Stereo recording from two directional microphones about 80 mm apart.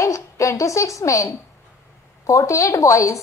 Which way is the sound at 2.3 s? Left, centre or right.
Left.